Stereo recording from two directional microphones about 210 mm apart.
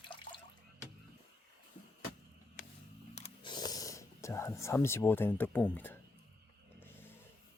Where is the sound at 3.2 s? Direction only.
20° left (ahead or behind).